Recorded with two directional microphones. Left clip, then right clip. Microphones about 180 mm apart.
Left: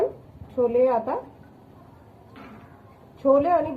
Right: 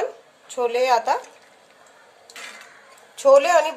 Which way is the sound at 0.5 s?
65° right (ahead or behind).